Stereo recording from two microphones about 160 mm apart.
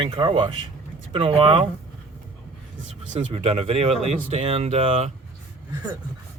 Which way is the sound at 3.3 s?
35° right (ahead or behind).